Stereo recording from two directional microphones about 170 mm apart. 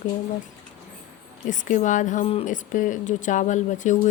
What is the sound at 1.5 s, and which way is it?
Speech, 50° left (ahead or behind).